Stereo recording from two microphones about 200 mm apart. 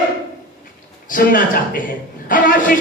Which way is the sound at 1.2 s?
45° left (ahead or behind).